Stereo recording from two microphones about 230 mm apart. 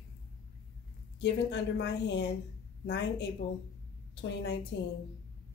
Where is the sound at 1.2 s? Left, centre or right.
Left.